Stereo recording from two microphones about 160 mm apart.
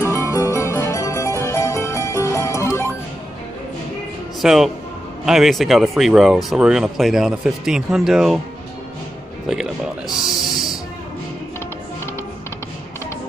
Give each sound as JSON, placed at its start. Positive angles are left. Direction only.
{"t": 0.1, "sound": "music", "side_deg": 20}
{"t": 4.4, "sound": "a man's voice", "side_deg": -5}
{"t": 9.5, "sound": "music", "side_deg": -5}